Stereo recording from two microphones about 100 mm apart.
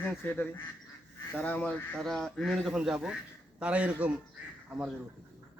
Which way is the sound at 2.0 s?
5° left (ahead or behind).